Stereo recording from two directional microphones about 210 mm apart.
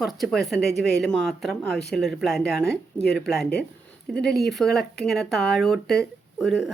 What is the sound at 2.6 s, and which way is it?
Speech, 50° left (ahead or behind).